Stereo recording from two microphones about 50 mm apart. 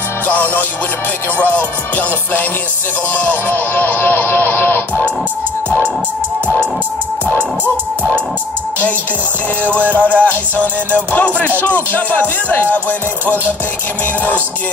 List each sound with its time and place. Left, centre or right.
1.4 s music: left
3.4 s music: left
6.4 s music: left
9.7 s music: left